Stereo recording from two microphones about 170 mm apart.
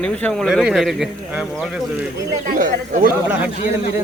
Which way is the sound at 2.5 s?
55° right (ahead or behind).